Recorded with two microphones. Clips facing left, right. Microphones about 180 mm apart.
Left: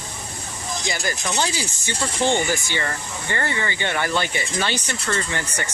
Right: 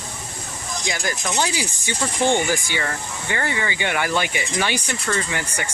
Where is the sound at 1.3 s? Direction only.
10° right (ahead or behind).